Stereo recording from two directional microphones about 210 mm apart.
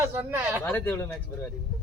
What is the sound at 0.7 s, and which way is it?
Speech, 10° left (ahead or behind).